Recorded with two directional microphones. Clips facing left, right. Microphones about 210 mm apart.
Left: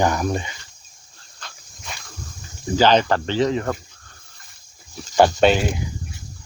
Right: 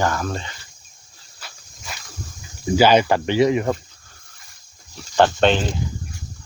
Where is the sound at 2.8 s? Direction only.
10° right (ahead or behind).